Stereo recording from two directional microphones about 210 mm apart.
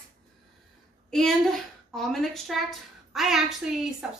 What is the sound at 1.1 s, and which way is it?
A woman's voice, centre (ahead or behind).